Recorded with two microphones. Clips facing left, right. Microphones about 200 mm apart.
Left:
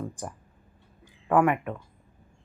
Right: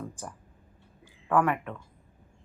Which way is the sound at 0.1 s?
15° left (ahead or behind).